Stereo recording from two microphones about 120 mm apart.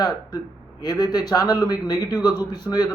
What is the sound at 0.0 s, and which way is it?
A man's voice, 35° left (ahead or behind).